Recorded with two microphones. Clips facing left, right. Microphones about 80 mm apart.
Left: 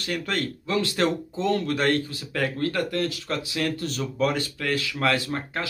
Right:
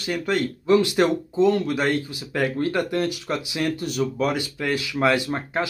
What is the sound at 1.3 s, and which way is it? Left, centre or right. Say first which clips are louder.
Speech: right 5 dB; centre.